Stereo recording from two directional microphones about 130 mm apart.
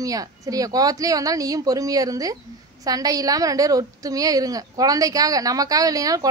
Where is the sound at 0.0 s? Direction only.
25° right (ahead or behind).